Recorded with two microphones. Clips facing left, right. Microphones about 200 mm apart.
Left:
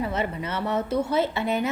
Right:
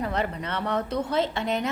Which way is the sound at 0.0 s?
5° left (ahead or behind).